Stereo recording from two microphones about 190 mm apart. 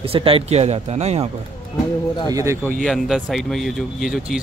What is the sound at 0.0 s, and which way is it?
Speech, 30° right (ahead or behind).